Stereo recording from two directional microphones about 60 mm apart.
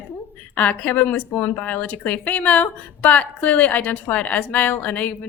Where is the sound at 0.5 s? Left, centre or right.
Left.